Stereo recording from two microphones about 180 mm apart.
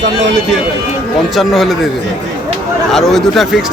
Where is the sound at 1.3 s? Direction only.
Centre (ahead or behind).